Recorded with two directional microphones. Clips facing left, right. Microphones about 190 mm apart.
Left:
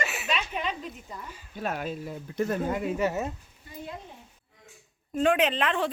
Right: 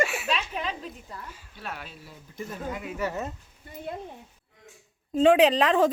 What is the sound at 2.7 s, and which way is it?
Speech, 40° left (ahead or behind).